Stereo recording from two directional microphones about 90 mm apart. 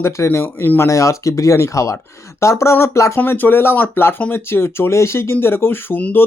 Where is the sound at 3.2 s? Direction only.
20° left (ahead or behind).